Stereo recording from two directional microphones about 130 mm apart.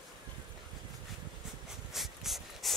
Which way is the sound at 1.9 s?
Centre (ahead or behind).